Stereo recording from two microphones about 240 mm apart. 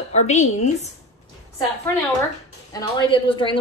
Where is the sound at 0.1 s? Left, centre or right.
Left.